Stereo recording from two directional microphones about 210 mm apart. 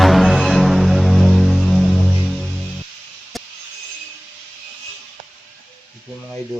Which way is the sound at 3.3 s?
Centre (ahead or behind).